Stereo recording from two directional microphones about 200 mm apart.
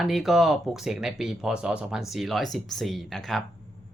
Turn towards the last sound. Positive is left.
turn(degrees=0)  # may be behind; listen again after turning